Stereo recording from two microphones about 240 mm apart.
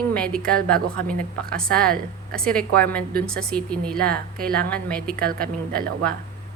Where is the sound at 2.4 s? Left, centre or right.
Centre.